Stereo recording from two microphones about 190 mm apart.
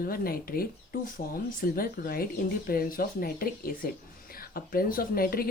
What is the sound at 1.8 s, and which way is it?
Speech, 50° left (ahead or behind).